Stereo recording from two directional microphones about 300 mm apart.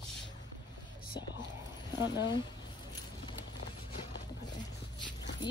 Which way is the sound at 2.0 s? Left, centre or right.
Left.